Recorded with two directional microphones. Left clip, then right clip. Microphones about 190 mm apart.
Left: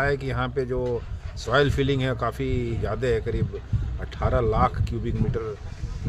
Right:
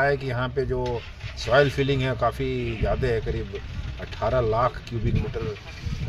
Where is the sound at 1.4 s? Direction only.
30° left (ahead or behind).